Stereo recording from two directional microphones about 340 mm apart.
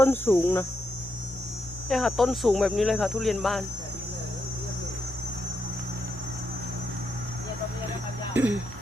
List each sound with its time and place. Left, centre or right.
0.0 s cricket: centre
1.9 s speech: centre
8.3 s speech: centre